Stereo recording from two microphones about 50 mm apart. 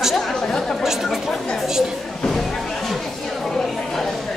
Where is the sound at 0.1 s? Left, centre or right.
Centre.